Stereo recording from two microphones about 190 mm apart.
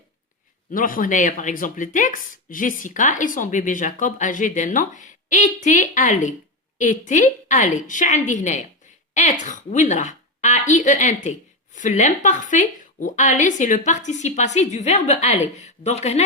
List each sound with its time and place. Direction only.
0.7 s a woman's voice: 45° left (ahead or behind)